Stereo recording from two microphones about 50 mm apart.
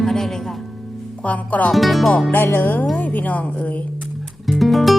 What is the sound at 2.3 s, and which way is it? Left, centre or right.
Speech, left.